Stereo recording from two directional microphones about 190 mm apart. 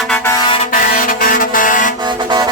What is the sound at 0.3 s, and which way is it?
Vehicle, 25° left (ahead or behind).